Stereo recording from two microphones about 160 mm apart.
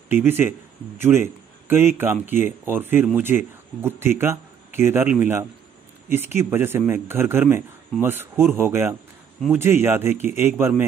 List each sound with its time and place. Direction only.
0.1 s a man's voice: 15° right (ahead or behind)